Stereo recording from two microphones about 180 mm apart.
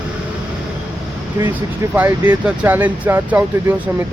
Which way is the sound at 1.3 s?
10° right (ahead or behind).